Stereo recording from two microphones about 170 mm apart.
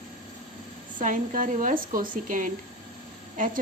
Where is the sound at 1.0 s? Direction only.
50° right (ahead or behind).